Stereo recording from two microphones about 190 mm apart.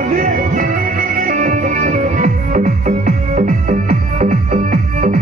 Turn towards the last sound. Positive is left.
turn(degrees=-40)  # may be behind; listen again after turning